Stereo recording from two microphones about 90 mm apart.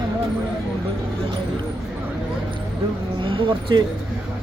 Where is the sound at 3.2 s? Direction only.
75° right (ahead or behind).